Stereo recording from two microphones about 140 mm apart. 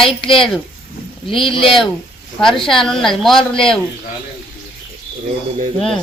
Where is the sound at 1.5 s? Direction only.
40° left (ahead or behind).